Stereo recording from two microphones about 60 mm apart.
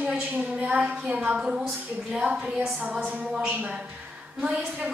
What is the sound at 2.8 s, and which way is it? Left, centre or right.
A woman's voice, right.